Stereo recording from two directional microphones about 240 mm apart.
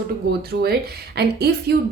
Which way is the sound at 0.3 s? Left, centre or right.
Right.